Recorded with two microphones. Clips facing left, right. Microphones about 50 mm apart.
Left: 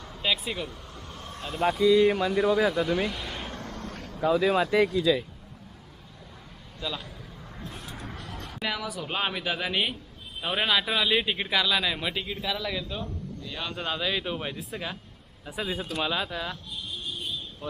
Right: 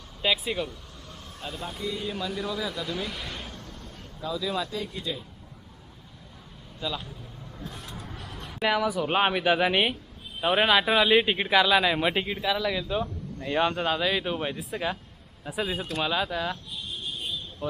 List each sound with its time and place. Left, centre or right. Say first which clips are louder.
0.2 s speech: right 2 dB; centre
0.7 s vehicle: left 2 dB; left
1.6 s speech: left 15 dB; left
2.1 s speech: left 8 dB; left
3.1 s speech: left 1 dB; centre
3.5 s a sound: left 6 dB; left
4.2 s speech: left 7 dB; left
4.8 s speech: left 11 dB; left
6.7 s speech: right 2 dB; centre
7.9 s a sound: left 1 dB; left
8.6 s speech: right 7 dB; centre
17.6 s speech: right 5 dB; centre